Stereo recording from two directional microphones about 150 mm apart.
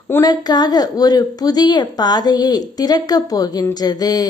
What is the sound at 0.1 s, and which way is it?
A woman's voice, 25° left (ahead or behind).